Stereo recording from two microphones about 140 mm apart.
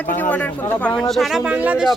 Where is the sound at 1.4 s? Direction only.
10° right (ahead or behind).